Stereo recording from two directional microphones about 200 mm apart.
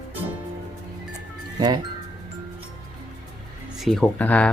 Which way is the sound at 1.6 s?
20° right (ahead or behind).